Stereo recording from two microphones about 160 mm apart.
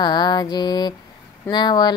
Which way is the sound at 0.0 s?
25° left (ahead or behind).